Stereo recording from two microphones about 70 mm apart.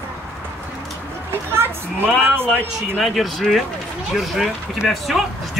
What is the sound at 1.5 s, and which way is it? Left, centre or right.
Speech, right.